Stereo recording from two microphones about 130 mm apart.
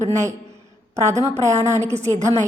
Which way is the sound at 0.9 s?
25° right (ahead or behind).